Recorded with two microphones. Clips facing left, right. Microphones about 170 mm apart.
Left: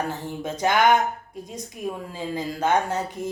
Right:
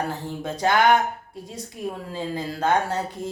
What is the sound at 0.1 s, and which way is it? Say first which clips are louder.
A woman's voice: even; 20° left (ahead or behind).